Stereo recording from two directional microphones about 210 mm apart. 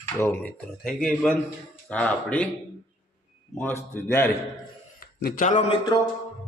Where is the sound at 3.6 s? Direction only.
10° left (ahead or behind).